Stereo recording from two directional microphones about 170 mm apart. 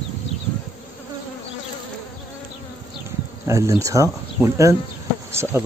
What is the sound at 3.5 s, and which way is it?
Speech, 15° right (ahead or behind).